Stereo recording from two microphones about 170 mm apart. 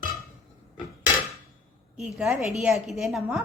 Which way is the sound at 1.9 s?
5° right (ahead or behind).